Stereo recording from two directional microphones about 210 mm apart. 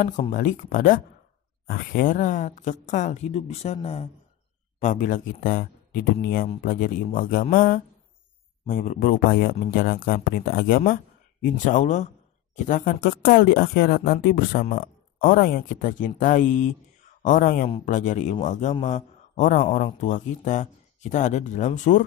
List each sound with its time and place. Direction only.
0.0 s a man's voice: 35° left (ahead or behind)
17.6 s a man's voice: 30° left (ahead or behind)